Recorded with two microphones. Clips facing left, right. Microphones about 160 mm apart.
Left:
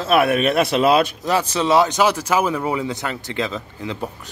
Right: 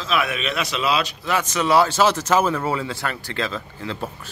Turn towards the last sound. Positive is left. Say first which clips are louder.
# left 2 dB
turn(degrees=15)  # may be behind; listen again after turning